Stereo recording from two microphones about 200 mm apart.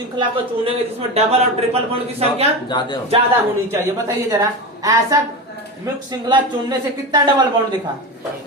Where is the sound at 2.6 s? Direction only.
20° left (ahead or behind).